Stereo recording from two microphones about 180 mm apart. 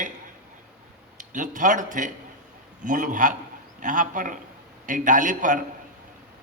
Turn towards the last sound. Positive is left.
turn(degrees=-45)  # may be behind; listen again after turning